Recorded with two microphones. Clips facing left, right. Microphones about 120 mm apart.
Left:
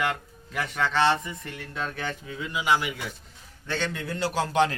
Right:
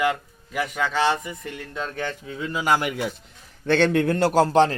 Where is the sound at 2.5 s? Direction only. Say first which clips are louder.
Right 3 dB; 45° right (ahead or behind).